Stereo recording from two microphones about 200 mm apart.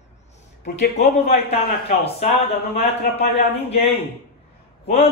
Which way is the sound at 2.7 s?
30° left (ahead or behind).